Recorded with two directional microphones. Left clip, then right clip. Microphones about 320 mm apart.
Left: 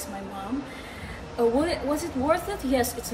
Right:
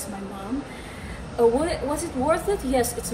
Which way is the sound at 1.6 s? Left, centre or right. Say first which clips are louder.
Right 1 dB; centre.